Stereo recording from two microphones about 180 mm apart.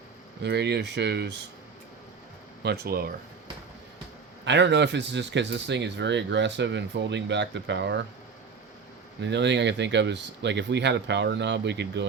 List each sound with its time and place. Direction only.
0.4 s speech: 70° right (ahead or behind)
2.6 s speech: 60° right (ahead or behind)
4.4 s speech: 80° right
9.2 s speech: 80° right